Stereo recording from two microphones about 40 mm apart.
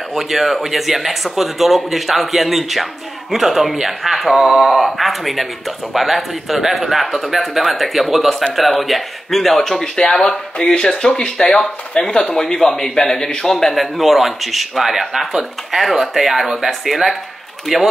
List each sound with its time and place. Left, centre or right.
0.1 s speech: centre
9.9 s speech: centre
10.6 s speech: left; by 17.8 s centre